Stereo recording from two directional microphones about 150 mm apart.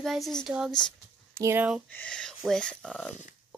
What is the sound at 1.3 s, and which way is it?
Speech, 15° right (ahead or behind).